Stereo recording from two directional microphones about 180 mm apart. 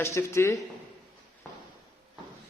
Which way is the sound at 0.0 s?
15° left (ahead or behind).